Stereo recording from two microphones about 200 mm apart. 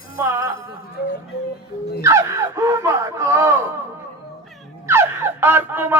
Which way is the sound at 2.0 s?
15° right (ahead or behind).